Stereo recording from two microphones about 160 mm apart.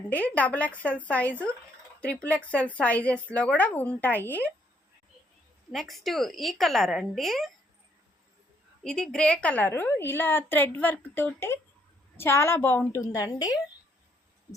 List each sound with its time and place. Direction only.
0.1 s a woman's voice: 10° left (ahead or behind)
5.7 s a woman's voice: centre (ahead or behind)
8.8 s a woman's voice: 5° left (ahead or behind); by 13.6 s 25° left (ahead or behind)